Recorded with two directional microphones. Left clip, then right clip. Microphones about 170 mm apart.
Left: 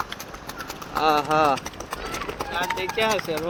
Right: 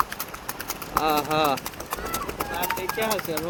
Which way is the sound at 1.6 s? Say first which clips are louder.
Even; 10° right (ahead or behind).